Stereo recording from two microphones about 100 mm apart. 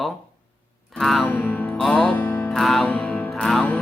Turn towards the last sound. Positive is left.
turn(degrees=0)  # may be behind; listen again after turning